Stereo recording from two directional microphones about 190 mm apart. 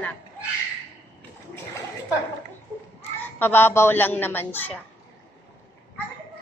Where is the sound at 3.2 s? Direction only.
10° left (ahead or behind).